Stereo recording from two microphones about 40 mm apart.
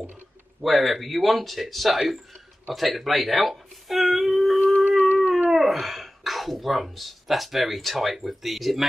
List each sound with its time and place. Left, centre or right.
0.6 s speech: centre
4.9 s howl: right
5.5 s speech: centre